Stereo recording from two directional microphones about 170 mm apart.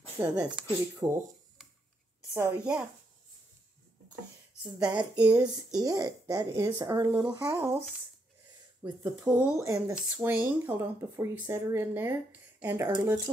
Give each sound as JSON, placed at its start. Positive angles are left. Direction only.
{"t": 0.2, "sound": "a woman's voice", "side_deg": -10}
{"t": 2.3, "sound": "a woman's voice", "side_deg": -15}
{"t": 4.9, "sound": "a woman's voice", "side_deg": -10}
{"t": 5.4, "sound": "speech", "side_deg": -20}
{"t": 8.8, "sound": "a woman's voice", "side_deg": -15}